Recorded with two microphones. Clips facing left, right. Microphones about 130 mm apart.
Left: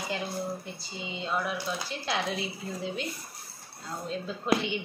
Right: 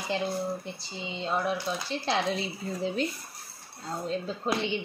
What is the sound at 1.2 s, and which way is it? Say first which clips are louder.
A woman's voice: right 3 dB; 30° right (ahead or behind).